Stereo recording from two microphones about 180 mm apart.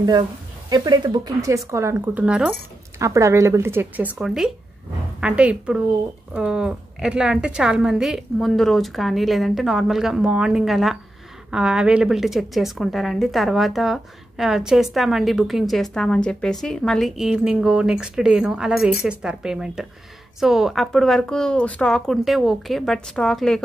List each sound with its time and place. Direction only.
0.0 s speech: 25° right (ahead or behind); by 2.5 s 5° right (ahead or behind)
3.0 s a woman's voice: 15° right (ahead or behind); by 23.6 s 5° left (ahead or behind)